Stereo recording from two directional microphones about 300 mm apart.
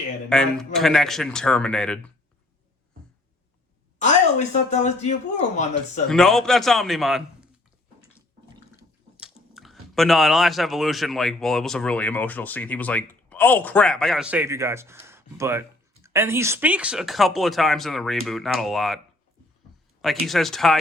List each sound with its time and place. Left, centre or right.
0.3 s speech: centre
3.9 s speech: left
6.1 s speech: centre
8.7 s speech: centre
20.0 s speech: centre